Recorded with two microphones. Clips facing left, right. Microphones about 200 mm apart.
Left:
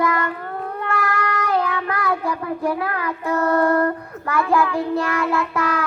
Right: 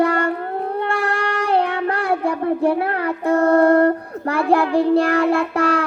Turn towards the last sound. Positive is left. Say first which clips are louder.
# right 4 dB
turn(degrees=-30)  # may be behind; listen again after turning